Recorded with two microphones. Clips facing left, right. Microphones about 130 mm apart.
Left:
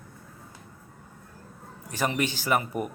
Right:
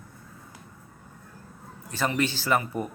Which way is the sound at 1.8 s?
15° left (ahead or behind).